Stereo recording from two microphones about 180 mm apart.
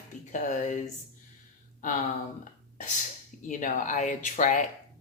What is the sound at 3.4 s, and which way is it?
Speech, 45° left (ahead or behind).